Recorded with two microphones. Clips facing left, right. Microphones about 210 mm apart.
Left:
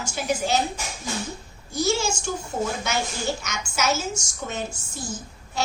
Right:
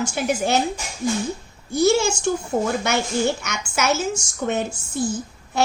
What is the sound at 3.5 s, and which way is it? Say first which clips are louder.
A woman's voice: right 3 dB; 60° right (ahead or behind).